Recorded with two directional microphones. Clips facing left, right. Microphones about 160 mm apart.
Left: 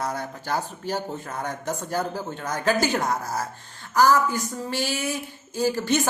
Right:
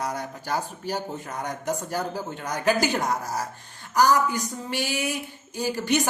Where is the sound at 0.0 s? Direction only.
15° right (ahead or behind).